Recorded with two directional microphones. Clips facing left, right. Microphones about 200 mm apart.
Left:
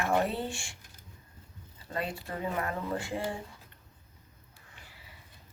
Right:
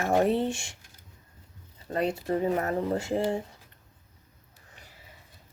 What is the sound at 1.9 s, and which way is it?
A woman's voice, 40° right (ahead or behind).